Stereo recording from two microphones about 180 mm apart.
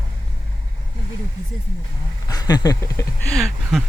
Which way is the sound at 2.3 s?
20° left (ahead or behind).